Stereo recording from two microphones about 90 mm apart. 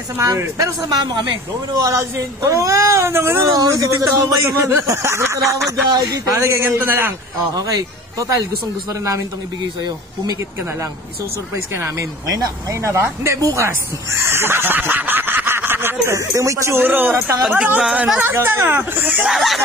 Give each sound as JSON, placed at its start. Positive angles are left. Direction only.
{"t": 0.2, "sound": "a man's voice", "side_deg": -45}
{"t": 1.7, "sound": "speech", "side_deg": -40}
{"t": 3.5, "sound": "speech", "side_deg": -40}
{"t": 7.5, "sound": "speech", "side_deg": -45}
{"t": 11.7, "sound": "speech", "side_deg": -35}
{"t": 16.2, "sound": "speech", "side_deg": -35}
{"t": 18.2, "sound": "speech", "side_deg": -25}
{"t": 19.2, "sound": "speech", "side_deg": 0}